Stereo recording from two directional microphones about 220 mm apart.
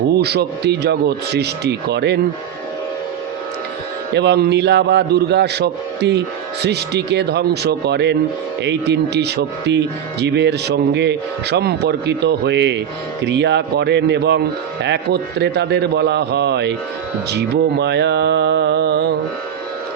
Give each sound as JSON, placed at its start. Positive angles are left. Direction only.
{"t": 0.2, "sound": "speech", "side_deg": -50}
{"t": 4.1, "sound": "speech", "side_deg": -50}